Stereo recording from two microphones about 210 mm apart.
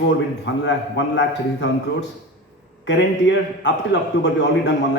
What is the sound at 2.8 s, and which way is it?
A man's voice, 60° left (ahead or behind).